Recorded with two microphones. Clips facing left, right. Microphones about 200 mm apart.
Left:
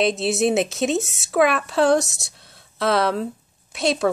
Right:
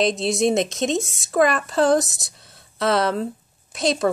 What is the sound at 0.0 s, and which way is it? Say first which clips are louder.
Speech: even; centre (ahead or behind).